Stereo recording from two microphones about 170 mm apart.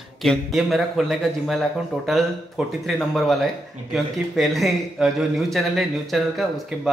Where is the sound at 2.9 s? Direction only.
Centre (ahead or behind).